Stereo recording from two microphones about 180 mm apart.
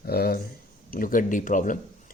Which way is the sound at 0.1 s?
60° left (ahead or behind).